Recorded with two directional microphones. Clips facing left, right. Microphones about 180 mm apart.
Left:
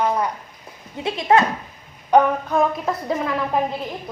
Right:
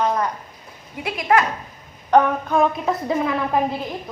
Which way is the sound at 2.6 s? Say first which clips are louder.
Right 2 dB; centre (ahead or behind).